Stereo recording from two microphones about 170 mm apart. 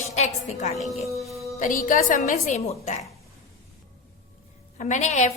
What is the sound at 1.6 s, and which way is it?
A woman's voice, 50° left (ahead or behind).